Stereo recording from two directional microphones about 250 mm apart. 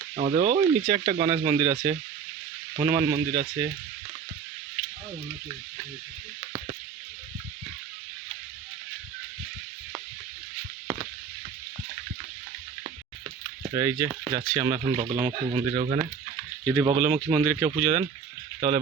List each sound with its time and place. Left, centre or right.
0.2 s speech: right
13.6 s speech: centre
16.6 s speech: centre
16.9 s speech: right